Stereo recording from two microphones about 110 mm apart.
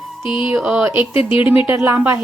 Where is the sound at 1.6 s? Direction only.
20° right (ahead or behind).